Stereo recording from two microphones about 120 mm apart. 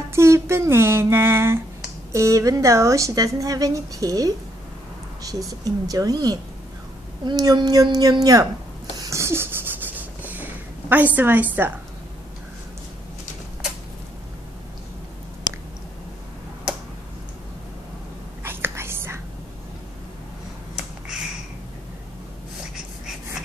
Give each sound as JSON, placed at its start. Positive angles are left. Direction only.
{"t": 0.1, "sound": "a woman's voice", "side_deg": -20}
{"t": 9.0, "sound": "a sound", "side_deg": -25}
{"t": 18.4, "sound": "whispering", "side_deg": -20}